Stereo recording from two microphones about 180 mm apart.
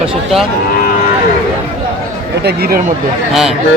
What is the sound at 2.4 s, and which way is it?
Speech, 60° right (ahead or behind).